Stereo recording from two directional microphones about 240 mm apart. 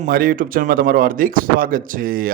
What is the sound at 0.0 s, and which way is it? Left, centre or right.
Speech, right.